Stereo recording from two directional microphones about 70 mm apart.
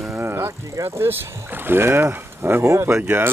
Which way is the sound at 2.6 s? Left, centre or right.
Right.